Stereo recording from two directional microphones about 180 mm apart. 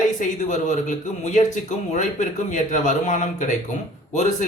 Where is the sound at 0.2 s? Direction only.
45° left (ahead or behind).